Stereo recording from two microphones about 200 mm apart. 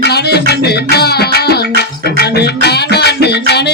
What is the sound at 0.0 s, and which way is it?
Music, 55° left (ahead or behind).